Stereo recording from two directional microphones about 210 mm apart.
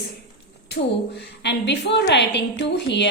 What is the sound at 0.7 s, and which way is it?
A woman's voice, 50° left (ahead or behind).